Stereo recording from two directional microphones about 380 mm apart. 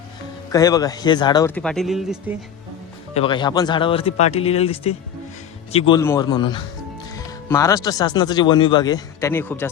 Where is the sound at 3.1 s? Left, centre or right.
Centre.